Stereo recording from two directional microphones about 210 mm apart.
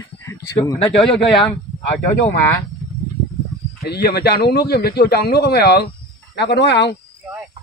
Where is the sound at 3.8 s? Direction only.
50° left (ahead or behind).